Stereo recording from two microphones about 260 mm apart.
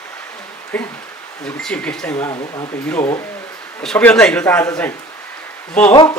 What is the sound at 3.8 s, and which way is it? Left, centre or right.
A man's voice, centre.